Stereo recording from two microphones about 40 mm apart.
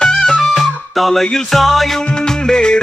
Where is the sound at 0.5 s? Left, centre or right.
Centre.